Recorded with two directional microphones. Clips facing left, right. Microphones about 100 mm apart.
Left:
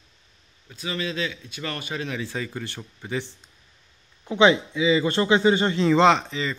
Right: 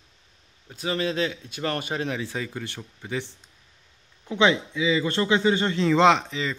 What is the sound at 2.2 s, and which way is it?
Speech, 10° right (ahead or behind).